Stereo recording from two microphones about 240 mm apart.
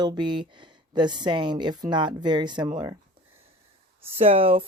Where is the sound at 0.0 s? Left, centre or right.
Centre.